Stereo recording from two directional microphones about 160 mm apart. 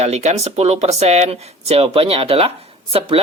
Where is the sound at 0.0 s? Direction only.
45° right (ahead or behind).